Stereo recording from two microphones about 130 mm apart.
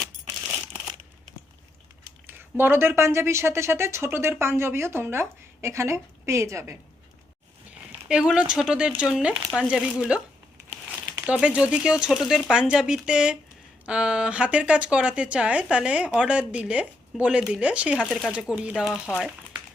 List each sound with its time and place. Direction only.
2.2 s speech: 15° right (ahead or behind)
8.0 s speech: 5° right (ahead or behind)
11.3 s speech: 10° right (ahead or behind)
18.0 s speech: centre (ahead or behind)